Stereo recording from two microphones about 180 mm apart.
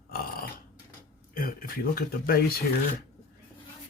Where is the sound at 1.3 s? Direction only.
55° left (ahead or behind).